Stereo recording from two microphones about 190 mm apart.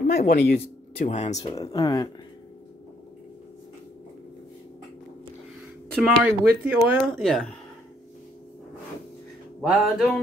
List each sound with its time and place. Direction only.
0.0 s speech: 50° left (ahead or behind)
1.0 s speech: 40° left (ahead or behind)
1.5 s speech: 20° left (ahead or behind)
5.9 s speech: 5° right (ahead or behind)
7.2 s a sound: centre (ahead or behind)
9.6 s a sound: centre (ahead or behind)